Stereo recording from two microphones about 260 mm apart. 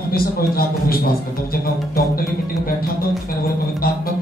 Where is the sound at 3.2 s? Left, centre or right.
Left.